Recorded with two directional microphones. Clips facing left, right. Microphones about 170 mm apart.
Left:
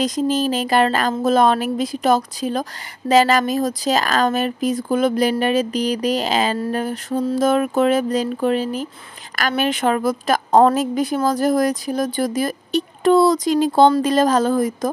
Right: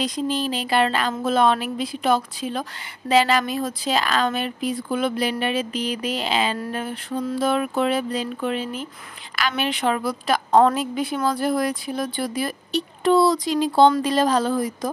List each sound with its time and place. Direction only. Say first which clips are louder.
0.0 s speech: left 5 dB; 45° left (ahead or behind)